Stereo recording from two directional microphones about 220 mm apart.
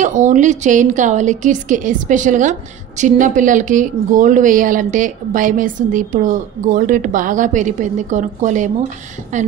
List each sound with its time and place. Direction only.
0.0 s speech: 35° right (ahead or behind)